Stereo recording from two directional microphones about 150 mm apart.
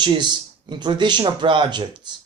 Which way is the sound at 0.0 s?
30° right (ahead or behind).